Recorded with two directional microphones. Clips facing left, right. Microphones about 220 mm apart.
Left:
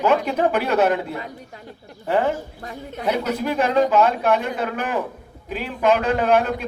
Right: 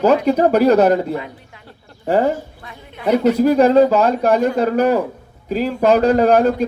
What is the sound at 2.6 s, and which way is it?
Speech, 40° left (ahead or behind).